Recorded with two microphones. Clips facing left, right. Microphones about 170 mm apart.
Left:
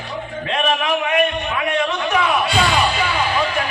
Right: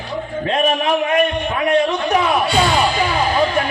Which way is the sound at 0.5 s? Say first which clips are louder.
Right 2 dB; 35° right (ahead or behind).